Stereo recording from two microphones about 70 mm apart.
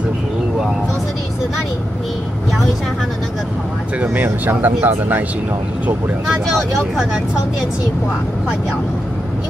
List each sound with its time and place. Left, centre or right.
4.0 s speech: right
6.2 s speech: centre